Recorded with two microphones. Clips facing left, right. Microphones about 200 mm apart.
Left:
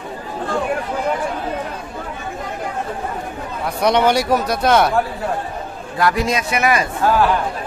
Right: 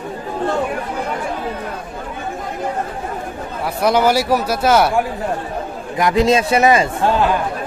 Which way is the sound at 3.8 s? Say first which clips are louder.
Right 1 dB; 5° right (ahead or behind).